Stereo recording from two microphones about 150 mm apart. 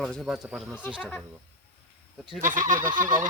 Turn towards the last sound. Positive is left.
turn(degrees=-60)  # may be behind; listen again after turning